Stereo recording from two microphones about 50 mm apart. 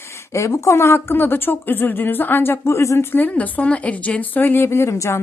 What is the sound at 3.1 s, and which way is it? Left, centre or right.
Speech, left.